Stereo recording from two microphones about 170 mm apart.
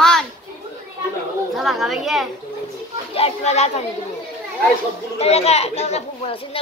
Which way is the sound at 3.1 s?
40° left (ahead or behind).